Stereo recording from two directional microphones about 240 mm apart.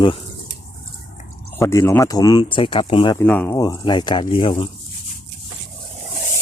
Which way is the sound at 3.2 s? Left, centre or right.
Centre.